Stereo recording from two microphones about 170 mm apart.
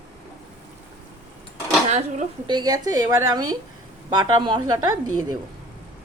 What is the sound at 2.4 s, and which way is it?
A woman's voice, 25° right (ahead or behind).